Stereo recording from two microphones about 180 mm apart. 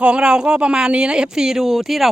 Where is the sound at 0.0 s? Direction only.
5° right (ahead or behind).